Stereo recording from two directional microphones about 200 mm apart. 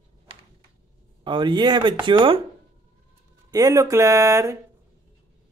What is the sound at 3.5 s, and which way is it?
Speech, 15° right (ahead or behind).